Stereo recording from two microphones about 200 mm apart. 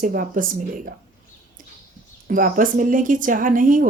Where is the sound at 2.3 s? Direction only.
45° right (ahead or behind).